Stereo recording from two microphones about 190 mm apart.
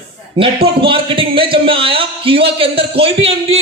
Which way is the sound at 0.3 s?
30° right (ahead or behind).